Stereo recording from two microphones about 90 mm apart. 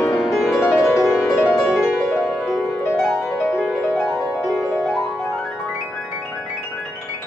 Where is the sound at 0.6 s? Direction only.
30° left (ahead or behind).